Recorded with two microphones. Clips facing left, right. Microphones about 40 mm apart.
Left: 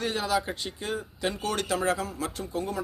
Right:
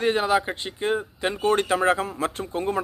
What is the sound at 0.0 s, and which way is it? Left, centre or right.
Speech, right.